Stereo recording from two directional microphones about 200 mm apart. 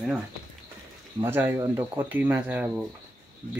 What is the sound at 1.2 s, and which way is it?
Speech, 10° right (ahead or behind).